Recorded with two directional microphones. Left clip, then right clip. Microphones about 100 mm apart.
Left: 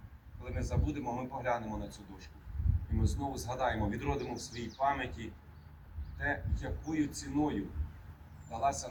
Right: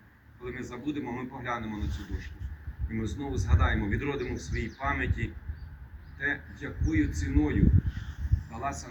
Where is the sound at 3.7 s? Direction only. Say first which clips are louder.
Right 4 dB; 25° left (ahead or behind).